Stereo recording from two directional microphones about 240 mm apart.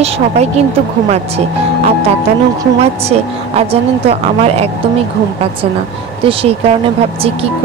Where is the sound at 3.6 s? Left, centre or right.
Right.